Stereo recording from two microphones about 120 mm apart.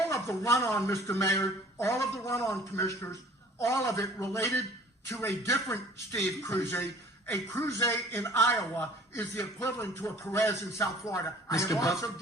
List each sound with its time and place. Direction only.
0.1 s a man's voice: 20° left (ahead or behind)